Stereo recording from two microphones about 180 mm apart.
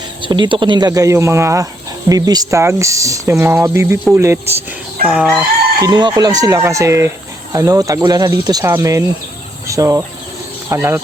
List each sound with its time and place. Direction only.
0.2 s speech: 25° right (ahead or behind)
5.0 s chicken: centre (ahead or behind)
5.8 s speech: 25° right (ahead or behind)